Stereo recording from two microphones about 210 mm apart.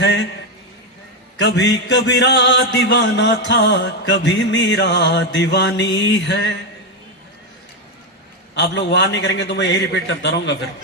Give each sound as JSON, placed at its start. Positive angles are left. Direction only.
{"t": 0.0, "sound": "a sound", "side_deg": 55}
{"t": 1.4, "sound": "mantra", "side_deg": 55}
{"t": 8.5, "sound": "mantra", "side_deg": 55}